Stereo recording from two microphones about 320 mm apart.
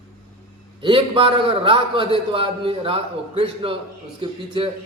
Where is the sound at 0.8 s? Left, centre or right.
Centre.